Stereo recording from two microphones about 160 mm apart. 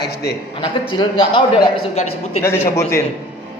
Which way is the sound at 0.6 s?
30° left (ahead or behind).